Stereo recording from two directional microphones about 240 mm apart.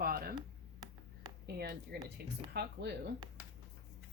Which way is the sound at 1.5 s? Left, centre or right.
Right.